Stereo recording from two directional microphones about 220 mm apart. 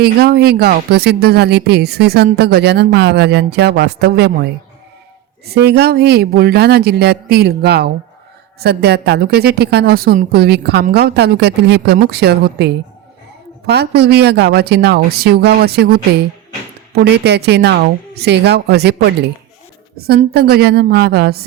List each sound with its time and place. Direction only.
0.0 s speech: 45° right (ahead or behind)
5.6 s speech: 45° right (ahead or behind)